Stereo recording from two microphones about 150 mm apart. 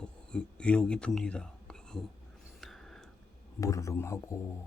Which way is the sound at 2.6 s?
Centre (ahead or behind).